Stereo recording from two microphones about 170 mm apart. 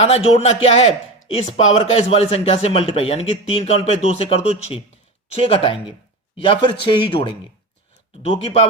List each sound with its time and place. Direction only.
0.0 s a man's voice: 40° left (ahead or behind)